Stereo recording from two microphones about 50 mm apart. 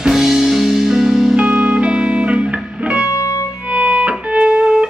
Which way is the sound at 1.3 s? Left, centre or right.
Right.